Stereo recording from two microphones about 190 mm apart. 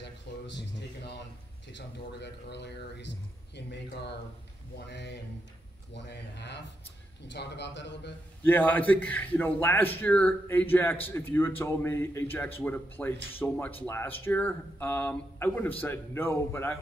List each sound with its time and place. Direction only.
0.0 s speech: 65° left (ahead or behind)
8.5 s speech: 10° left (ahead or behind)